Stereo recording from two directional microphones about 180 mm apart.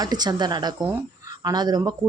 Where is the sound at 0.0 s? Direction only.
20° right (ahead or behind).